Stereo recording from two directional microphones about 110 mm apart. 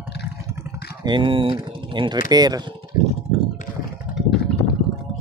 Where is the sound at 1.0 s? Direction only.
45° right (ahead or behind).